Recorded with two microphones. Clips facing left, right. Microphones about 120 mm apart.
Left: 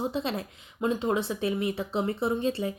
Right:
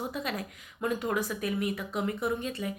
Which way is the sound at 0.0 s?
25° left (ahead or behind).